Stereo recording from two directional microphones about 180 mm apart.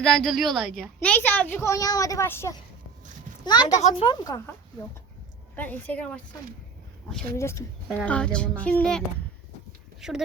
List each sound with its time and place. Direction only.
0.0 s a child's voice: centre (ahead or behind)
3.4 s speech: 25° left (ahead or behind)
5.5 s a child's voice: 10° left (ahead or behind)
7.3 s a child's voice: 15° left (ahead or behind); by 10.2 s 5° right (ahead or behind)